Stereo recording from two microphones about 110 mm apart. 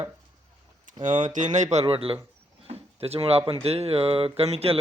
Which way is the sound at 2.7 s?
65° right (ahead or behind).